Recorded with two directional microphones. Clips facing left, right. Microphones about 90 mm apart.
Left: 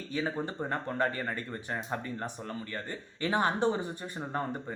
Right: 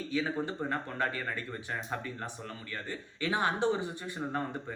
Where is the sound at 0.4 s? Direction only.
30° left (ahead or behind).